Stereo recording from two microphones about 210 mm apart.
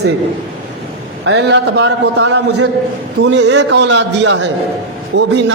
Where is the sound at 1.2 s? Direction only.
55° right (ahead or behind).